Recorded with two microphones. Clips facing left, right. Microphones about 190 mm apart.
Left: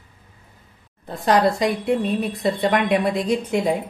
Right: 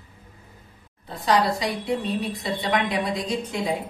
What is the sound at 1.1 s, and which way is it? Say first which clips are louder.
A woman's voice: left 4 dB; 50° left (ahead or behind).